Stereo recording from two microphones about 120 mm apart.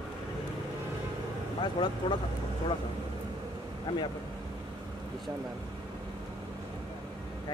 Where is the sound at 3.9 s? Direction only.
40° left (ahead or behind).